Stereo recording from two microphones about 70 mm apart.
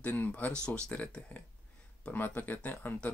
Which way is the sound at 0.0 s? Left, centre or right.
Left.